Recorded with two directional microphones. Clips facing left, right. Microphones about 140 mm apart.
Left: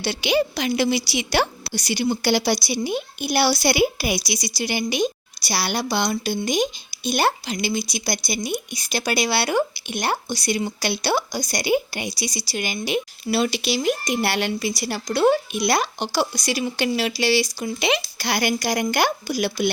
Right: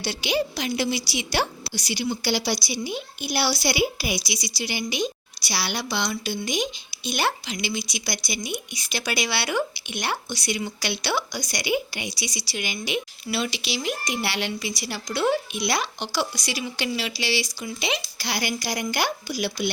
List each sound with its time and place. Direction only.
0.0 s a woman's voice: 60° left (ahead or behind)
17.6 s a woman's voice: 60° left (ahead or behind)